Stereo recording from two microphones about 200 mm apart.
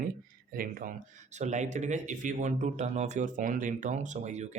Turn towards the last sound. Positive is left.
turn(degrees=-35)  # may be behind; listen again after turning